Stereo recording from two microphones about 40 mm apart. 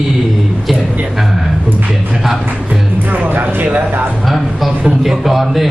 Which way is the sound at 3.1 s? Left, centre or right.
Right.